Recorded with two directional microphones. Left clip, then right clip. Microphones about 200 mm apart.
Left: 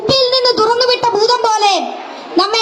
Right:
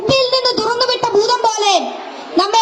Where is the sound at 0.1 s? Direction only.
15° left (ahead or behind).